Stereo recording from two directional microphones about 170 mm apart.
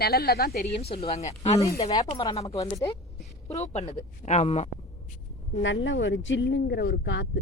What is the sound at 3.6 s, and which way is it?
Speech, 40° left (ahead or behind).